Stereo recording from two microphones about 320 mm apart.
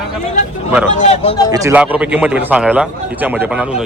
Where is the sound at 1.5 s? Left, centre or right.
Centre.